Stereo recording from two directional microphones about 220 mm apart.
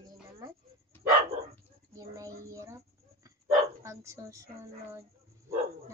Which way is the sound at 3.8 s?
15° right (ahead or behind).